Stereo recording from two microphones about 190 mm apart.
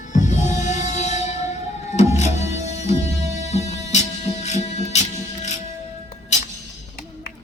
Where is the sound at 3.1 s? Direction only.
15° right (ahead or behind).